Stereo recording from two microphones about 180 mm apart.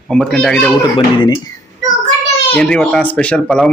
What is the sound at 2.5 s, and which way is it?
Speech, 5° left (ahead or behind).